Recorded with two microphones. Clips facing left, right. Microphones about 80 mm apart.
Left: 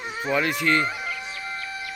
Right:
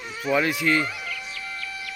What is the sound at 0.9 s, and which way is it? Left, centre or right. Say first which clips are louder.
Music: left 3 dB; left.